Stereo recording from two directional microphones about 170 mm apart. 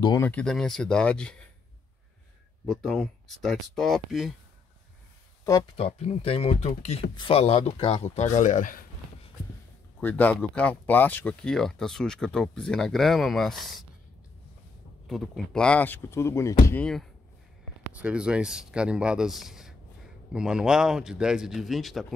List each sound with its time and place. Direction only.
0.2 s speech: 10° left (ahead or behind)
2.6 s speech: centre (ahead or behind)
5.8 s speech: 35° left (ahead or behind)
9.9 s speech: 10° left (ahead or behind)
15.0 s speech: centre (ahead or behind)